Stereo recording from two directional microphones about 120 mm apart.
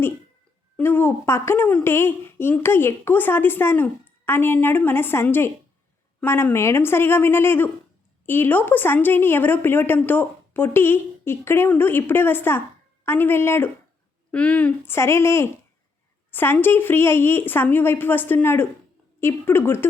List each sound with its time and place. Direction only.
0.8 s a woman's voice: 20° left (ahead or behind)
14.9 s a woman's voice: 20° left (ahead or behind)